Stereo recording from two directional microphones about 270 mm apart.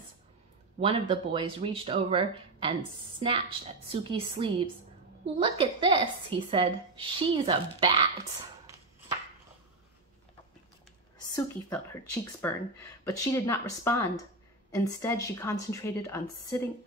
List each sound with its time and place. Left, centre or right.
0.7 s a woman's voice: centre
11.3 s a woman's voice: centre